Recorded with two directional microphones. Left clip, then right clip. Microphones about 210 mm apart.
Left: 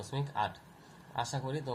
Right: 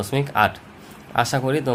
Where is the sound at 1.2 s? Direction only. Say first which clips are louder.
Right 16 dB; 35° right (ahead or behind).